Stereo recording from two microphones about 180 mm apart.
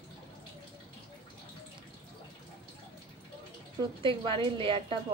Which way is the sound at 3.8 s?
25° right (ahead or behind).